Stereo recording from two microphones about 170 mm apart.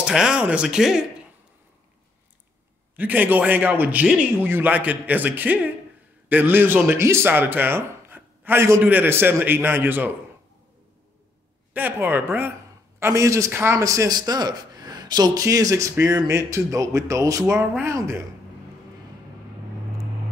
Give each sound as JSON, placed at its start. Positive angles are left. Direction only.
{"t": 0.0, "sound": "speech", "side_deg": -5}
{"t": 3.0, "sound": "a man's voice", "side_deg": -10}
{"t": 11.7, "sound": "a man's voice", "side_deg": -10}